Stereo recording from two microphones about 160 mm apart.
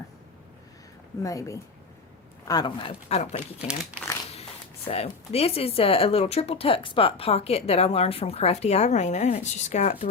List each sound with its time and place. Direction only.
1.2 s a woman's voice: 20° left (ahead or behind)
2.8 s speech: 40° left (ahead or behind)
4.9 s speech: 40° left (ahead or behind)